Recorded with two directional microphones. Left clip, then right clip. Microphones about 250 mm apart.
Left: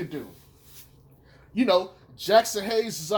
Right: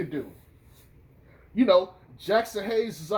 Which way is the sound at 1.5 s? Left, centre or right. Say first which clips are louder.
Right 2 dB; centre.